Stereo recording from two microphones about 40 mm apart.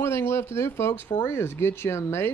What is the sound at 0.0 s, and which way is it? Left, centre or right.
Speech, left.